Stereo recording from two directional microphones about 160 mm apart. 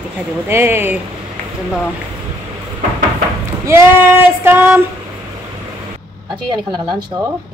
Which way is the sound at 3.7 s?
15° right (ahead or behind).